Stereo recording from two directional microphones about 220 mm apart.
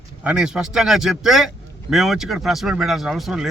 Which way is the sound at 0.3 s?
5° right (ahead or behind).